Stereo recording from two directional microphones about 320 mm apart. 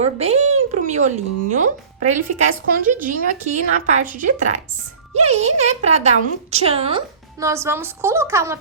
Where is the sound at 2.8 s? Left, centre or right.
Right.